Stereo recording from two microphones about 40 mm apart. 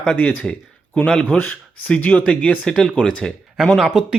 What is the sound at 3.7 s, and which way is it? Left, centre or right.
Speech, centre.